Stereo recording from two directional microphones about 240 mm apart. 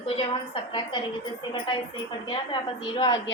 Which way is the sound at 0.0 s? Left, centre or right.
Left.